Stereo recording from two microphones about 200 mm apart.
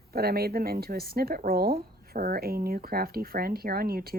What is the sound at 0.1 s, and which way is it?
Speech, 50° right (ahead or behind).